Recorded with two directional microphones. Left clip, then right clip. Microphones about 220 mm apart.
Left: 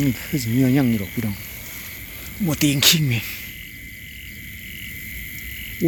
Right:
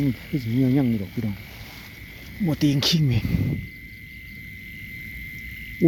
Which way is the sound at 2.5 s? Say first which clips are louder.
Left 5 dB; 15° right (ahead or behind).